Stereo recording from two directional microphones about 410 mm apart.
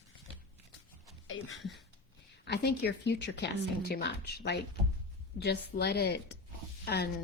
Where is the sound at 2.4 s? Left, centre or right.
Left.